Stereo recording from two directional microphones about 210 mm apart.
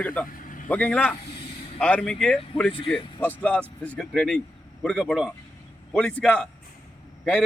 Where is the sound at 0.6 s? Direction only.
10° left (ahead or behind).